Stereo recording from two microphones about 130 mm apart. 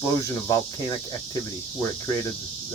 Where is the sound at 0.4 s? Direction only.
25° left (ahead or behind).